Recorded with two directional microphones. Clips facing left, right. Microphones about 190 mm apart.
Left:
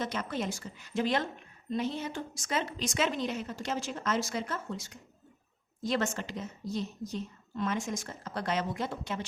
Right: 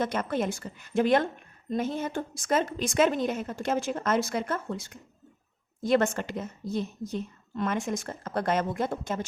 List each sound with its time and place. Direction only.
0.0 s a woman's voice: 50° right (ahead or behind)